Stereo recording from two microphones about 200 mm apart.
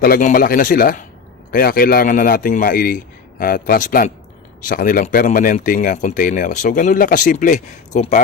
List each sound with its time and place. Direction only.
0.0 s a man's voice: 45° left (ahead or behind)